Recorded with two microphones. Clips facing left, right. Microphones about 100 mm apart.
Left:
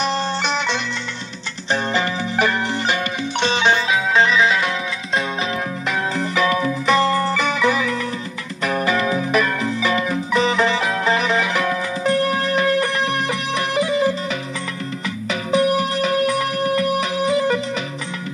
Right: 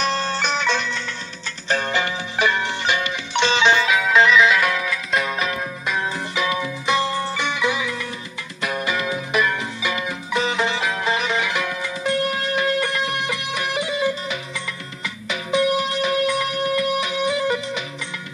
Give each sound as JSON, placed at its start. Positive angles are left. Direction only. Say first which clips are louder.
{"t": 0.0, "sound": "music", "louder": "left 1 dB", "side_deg": 20}
{"t": 1.7, "sound": "music", "louder": "left 2 dB", "side_deg": 30}
{"t": 6.3, "sound": "music", "louder": "left 6 dB", "side_deg": 45}
{"t": 15.2, "sound": "music", "louder": "left 2 dB", "side_deg": 35}